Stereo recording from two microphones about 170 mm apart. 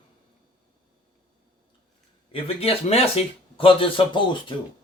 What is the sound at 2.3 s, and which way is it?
A man's voice, 35° left (ahead or behind).